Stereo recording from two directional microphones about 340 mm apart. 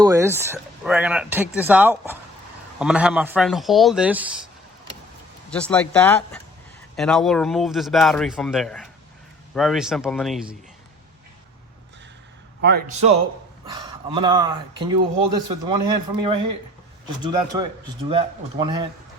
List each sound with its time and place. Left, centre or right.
0.0 s speech: centre
5.5 s speech: centre
12.6 s a man's voice: right
13.7 s speech: centre